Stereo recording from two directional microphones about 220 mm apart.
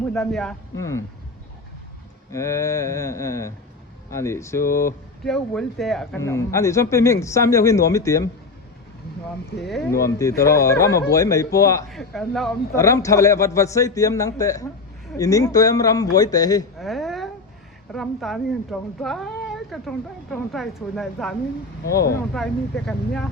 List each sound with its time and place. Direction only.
0.1 s speech: centre (ahead or behind)
0.8 s speech: 15° left (ahead or behind)
2.3 s speech: 15° left (ahead or behind)
5.2 s speech: centre (ahead or behind)
6.1 s speech: 15° left (ahead or behind)
9.6 s speech: centre (ahead or behind)
9.9 s speech: 15° left (ahead or behind)
11.9 s speech: centre (ahead or behind)
12.7 s speech: 15° left (ahead or behind)
16.7 s a sound: centre (ahead or behind)
17.9 s speech: centre (ahead or behind)
21.9 s speech: 15° left (ahead or behind)
22.4 s speech: 5° left (ahead or behind)